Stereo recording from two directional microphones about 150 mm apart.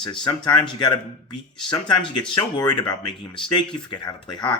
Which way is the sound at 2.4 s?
25° left (ahead or behind).